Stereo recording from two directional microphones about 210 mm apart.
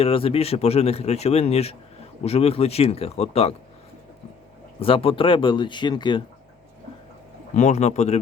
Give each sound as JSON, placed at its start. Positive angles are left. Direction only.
{"t": 0.0, "sound": "speech", "side_deg": 25}
{"t": 4.8, "sound": "speech", "side_deg": 25}
{"t": 7.5, "sound": "speech", "side_deg": 35}